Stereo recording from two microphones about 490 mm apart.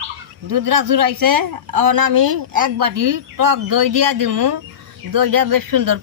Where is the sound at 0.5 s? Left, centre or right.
Right.